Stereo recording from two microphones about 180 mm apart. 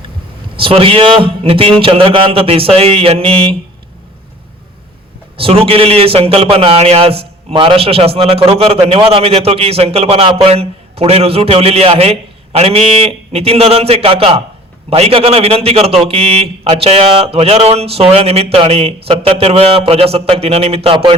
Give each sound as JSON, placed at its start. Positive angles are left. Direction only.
{"t": 0.6, "sound": "a man's voice", "side_deg": -30}
{"t": 5.4, "sound": "a man's voice", "side_deg": -30}